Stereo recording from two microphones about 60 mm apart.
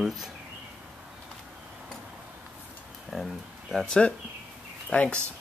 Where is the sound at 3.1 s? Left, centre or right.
Centre.